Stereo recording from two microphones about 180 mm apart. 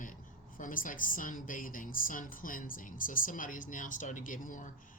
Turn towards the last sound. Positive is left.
turn(degrees=45)  # may be behind; listen again after turning